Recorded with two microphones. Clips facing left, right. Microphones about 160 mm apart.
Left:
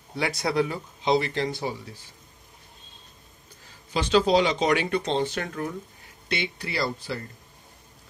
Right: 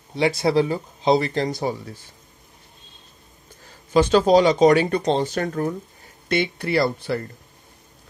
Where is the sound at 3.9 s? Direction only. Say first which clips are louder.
Right 6 dB; 45° right (ahead or behind).